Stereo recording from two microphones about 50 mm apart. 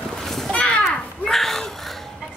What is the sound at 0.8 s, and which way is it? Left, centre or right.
Babbling, centre.